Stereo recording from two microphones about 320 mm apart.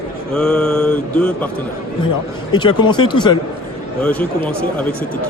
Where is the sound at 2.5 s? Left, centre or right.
Centre.